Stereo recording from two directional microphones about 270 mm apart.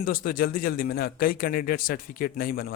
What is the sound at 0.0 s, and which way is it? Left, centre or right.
A man's voice, left.